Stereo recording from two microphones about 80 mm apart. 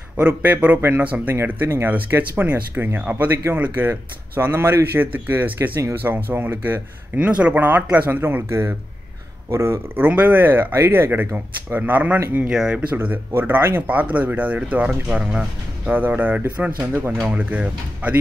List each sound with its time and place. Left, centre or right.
0.3 s speech: right
9.9 s speech: right
12.4 s speech: centre
12.9 s speech: right